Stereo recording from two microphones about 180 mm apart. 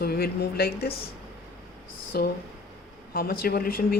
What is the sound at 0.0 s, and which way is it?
Speech, 60° left (ahead or behind).